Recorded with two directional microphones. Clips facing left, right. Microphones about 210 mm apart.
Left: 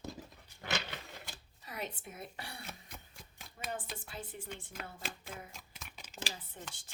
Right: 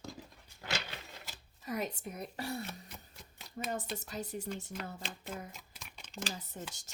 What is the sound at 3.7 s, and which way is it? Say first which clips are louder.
Speech: right 3 dB; 40° right (ahead or behind).